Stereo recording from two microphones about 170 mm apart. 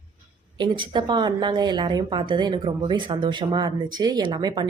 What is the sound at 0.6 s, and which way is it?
Speech, 25° right (ahead or behind).